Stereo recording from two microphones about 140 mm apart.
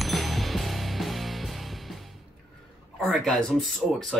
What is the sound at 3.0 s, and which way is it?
Speech, 5° left (ahead or behind).